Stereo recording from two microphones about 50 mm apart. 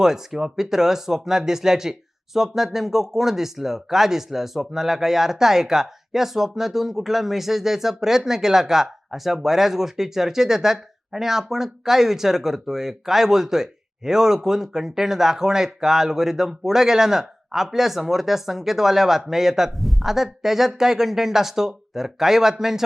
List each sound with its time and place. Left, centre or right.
0.0 s speech: centre